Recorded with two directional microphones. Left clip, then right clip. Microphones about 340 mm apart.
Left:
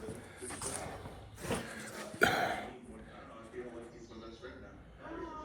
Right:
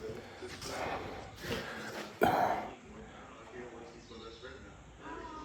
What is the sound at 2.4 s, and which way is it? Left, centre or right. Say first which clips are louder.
Throat clearing: right 4 dB; right.